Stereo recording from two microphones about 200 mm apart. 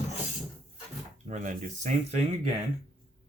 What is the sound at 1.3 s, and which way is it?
Speech, 35° right (ahead or behind).